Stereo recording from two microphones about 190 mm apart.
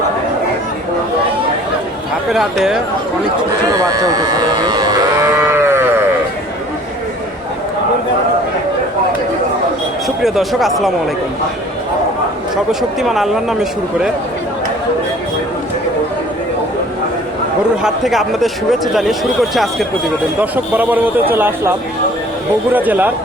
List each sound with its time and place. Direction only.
2.3 s speech: centre (ahead or behind)
3.8 s livestock: 20° right (ahead or behind)
10.2 s speech: centre (ahead or behind)
13.0 s speech: centre (ahead or behind)
17.8 s a man's voice: centre (ahead or behind)
22.7 s a man's voice: 10° right (ahead or behind)